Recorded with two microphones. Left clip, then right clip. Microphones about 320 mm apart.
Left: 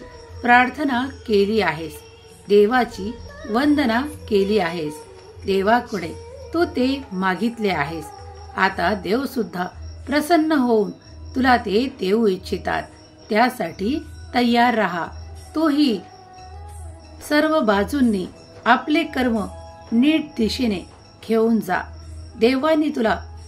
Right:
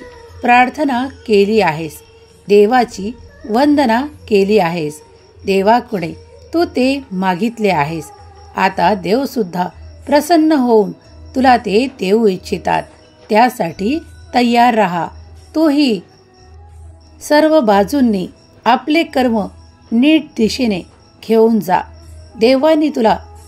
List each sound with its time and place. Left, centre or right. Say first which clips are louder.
0.4 s a woman's voice: right 5 dB; right
17.3 s a woman's voice: right 8 dB; right